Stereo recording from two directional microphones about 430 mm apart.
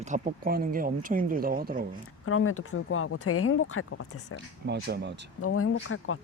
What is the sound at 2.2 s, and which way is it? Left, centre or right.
Speech, left.